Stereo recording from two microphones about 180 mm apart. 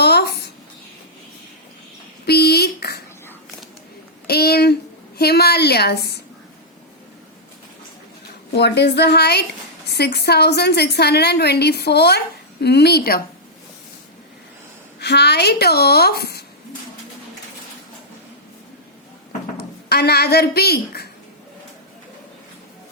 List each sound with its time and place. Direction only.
0.0 s a sound: 65° left (ahead or behind)
2.2 s a sound: 60° left (ahead or behind)
4.3 s a woman's voice: 60° left (ahead or behind)
8.5 s a woman's voice: 70° left (ahead or behind)
15.0 s a woman's voice: 65° left (ahead or behind)
19.9 s a woman's voice: 60° left (ahead or behind)